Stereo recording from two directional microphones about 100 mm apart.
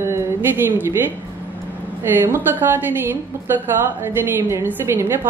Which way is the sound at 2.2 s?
25° right (ahead or behind).